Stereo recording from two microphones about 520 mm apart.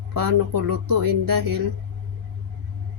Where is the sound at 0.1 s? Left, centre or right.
Right.